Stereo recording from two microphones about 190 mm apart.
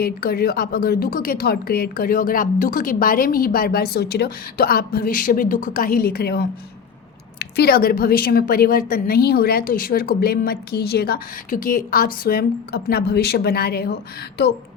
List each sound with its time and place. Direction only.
0.0 s a woman's voice: 55° left (ahead or behind)